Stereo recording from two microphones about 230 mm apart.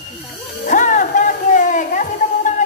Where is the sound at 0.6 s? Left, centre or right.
Left.